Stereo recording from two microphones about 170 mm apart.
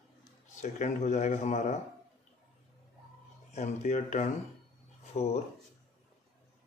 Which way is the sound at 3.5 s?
40° left (ahead or behind).